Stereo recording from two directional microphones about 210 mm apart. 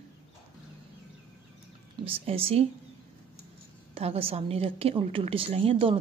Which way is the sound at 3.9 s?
25° right (ahead or behind).